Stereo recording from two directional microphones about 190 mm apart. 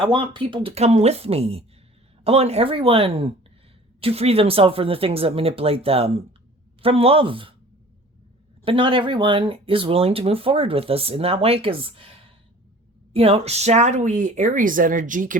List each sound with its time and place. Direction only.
0.0 s speech: 25° right (ahead or behind)
8.6 s speech: 25° right (ahead or behind); by 15.4 s 45° right (ahead or behind)